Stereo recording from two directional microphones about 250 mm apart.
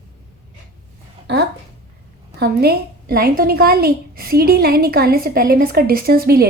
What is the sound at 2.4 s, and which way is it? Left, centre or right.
A woman's voice, right.